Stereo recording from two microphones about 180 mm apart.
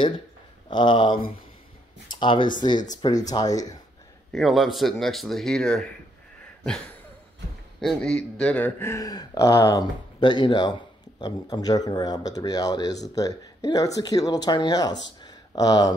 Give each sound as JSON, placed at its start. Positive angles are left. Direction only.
{"t": 0.7, "sound": "a man's voice", "side_deg": 25}
{"t": 4.3, "sound": "speech", "side_deg": 0}
{"t": 7.8, "sound": "a man's voice", "side_deg": 5}
{"t": 15.2, "sound": "a sound", "side_deg": 20}